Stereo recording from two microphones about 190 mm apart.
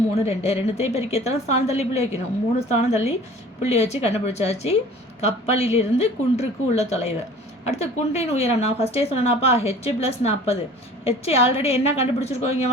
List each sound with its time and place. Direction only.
0.1 s a woman's voice: 35° left (ahead or behind)